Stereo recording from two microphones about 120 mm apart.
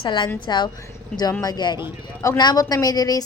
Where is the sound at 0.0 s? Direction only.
40° left (ahead or behind).